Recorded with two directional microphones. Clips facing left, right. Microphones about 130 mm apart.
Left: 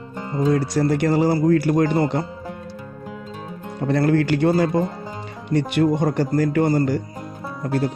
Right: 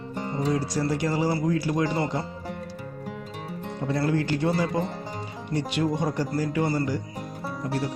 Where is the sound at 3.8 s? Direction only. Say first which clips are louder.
Left 7 dB; 60° left (ahead or behind).